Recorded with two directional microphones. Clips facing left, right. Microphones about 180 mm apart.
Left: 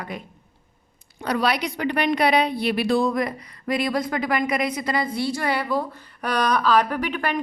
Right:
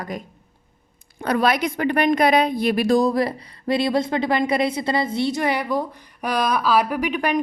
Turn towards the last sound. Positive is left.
turn(degrees=-15)  # may be behind; listen again after turning